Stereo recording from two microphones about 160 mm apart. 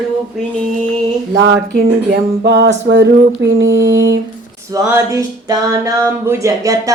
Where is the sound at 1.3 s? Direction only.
90° right.